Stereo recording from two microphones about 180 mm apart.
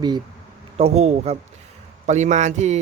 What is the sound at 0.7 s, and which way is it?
A man's voice, 35° right (ahead or behind).